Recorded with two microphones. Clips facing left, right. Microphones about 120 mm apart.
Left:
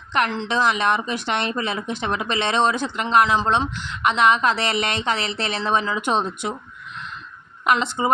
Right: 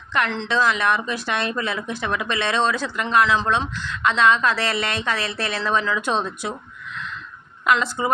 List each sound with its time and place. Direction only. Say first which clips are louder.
0.4 s speech: right 2 dB; 20° left (ahead or behind)
7.6 s speech: even; 20° left (ahead or behind)